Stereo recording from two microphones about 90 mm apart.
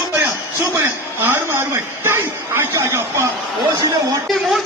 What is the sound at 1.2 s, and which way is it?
A man's voice, 25° right (ahead or behind).